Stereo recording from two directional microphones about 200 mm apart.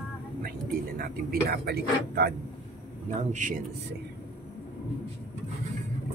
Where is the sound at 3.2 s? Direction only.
40° right (ahead or behind).